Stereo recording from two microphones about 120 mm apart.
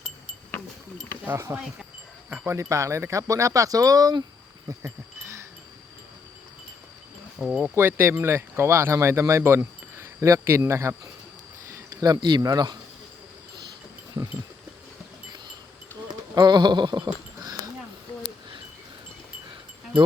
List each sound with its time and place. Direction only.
1.2 s speech: 20° right (ahead or behind)
4.7 s wind chime: 25° right (ahead or behind)
7.3 s speech: 5° right (ahead or behind)
7.8 s speech: 15° right (ahead or behind); by 12.7 s 35° right (ahead or behind)
16.0 s a sound: 35° right (ahead or behind)